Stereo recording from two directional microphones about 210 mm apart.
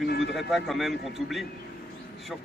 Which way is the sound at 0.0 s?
50° left (ahead or behind).